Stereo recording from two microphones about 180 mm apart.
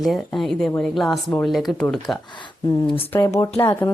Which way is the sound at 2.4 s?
30° left (ahead or behind).